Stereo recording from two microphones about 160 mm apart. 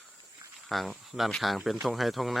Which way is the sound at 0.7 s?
Centre (ahead or behind).